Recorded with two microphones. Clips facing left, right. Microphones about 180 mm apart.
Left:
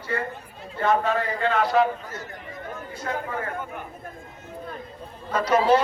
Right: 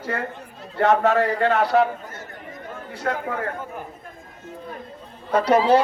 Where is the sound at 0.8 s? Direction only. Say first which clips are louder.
Right 5 dB; 70° right (ahead or behind).